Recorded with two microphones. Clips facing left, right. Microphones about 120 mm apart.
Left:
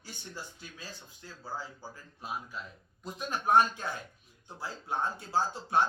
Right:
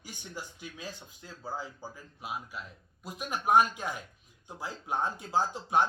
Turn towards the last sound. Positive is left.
turn(degrees=-15)  # may be behind; listen again after turning